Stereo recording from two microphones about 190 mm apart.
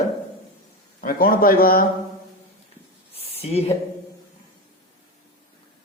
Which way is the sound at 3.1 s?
30° left (ahead or behind).